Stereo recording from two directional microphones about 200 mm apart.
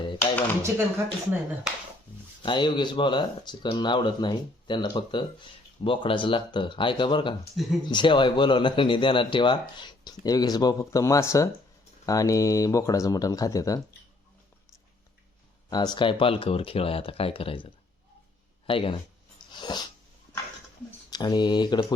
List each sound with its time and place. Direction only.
0.6 s speech: 15° right (ahead or behind)
2.4 s speech: 25° left (ahead or behind)
7.5 s speech: centre (ahead or behind)
7.9 s speech: 25° left (ahead or behind)
15.7 s speech: 20° left (ahead or behind)
19.5 s dog: 20° left (ahead or behind)
21.1 s speech: 20° left (ahead or behind)